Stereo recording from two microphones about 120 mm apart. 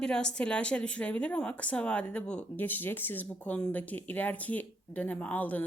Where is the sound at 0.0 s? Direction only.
5° left (ahead or behind).